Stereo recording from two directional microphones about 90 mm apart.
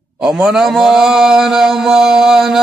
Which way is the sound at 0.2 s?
5° right (ahead or behind).